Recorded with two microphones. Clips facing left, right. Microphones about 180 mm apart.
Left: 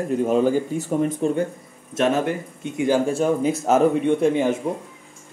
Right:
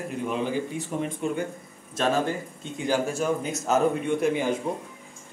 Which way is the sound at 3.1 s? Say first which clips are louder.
Left 7 dB; 30° left (ahead or behind).